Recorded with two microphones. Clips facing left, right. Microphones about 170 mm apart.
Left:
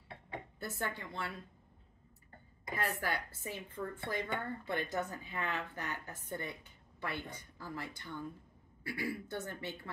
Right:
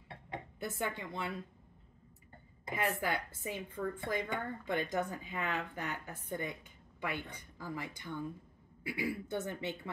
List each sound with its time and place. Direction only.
0.6 s a woman's voice: 15° right (ahead or behind)
2.7 s a woman's voice: 15° right (ahead or behind)